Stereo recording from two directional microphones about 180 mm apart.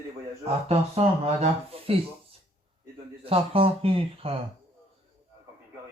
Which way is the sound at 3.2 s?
30° right (ahead or behind).